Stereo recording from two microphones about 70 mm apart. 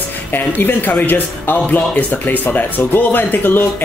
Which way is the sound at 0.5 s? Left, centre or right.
Left.